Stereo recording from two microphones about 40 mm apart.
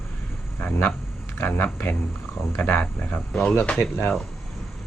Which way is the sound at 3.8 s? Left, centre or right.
Left.